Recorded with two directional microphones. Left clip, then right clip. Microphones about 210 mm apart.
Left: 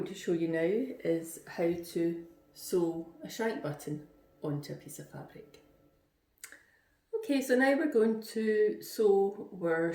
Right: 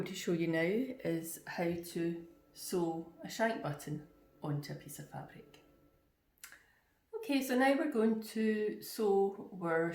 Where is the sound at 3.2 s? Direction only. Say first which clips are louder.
Right 1 dB; 10° right (ahead or behind).